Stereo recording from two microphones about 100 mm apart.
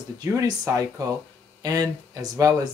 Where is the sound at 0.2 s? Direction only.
35° right (ahead or behind).